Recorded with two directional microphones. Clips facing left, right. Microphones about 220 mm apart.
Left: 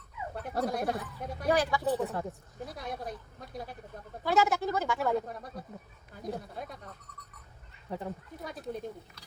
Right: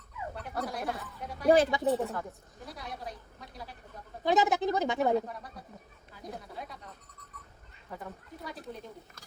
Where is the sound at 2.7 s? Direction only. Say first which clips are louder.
Left 3 dB; 50° left (ahead or behind).